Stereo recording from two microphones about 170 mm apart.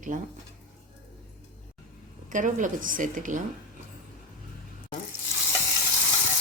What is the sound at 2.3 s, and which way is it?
A woman's voice, 50° right (ahead or behind).